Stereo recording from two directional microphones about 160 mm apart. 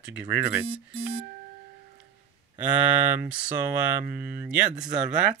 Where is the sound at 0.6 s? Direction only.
35° right (ahead or behind).